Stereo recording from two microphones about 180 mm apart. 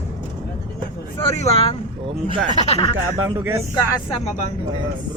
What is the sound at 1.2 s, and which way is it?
Speech, 35° left (ahead or behind).